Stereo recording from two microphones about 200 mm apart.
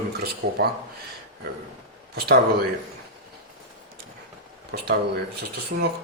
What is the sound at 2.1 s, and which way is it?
Speech, 50° right (ahead or behind).